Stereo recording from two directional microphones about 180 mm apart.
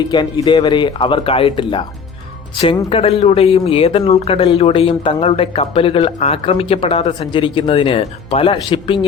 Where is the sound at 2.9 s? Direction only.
30° left (ahead or behind).